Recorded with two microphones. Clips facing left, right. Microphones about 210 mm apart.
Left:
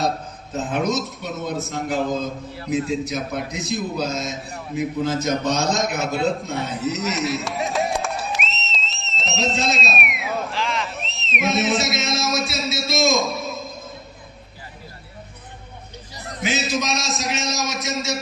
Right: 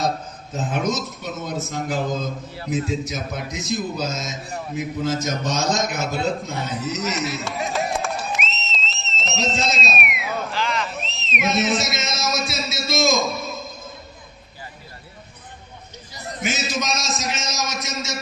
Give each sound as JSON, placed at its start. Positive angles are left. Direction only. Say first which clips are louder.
{"t": 0.7, "sound": "a man's voice", "louder": "left 2 dB", "side_deg": 0}
{"t": 5.0, "sound": "a man's voice", "louder": "left 1 dB", "side_deg": 60}
{"t": 5.6, "sound": "a man's voice", "louder": "left 1 dB", "side_deg": 0}
{"t": 16.6, "sound": "a man's voice", "louder": "left 2 dB", "side_deg": 0}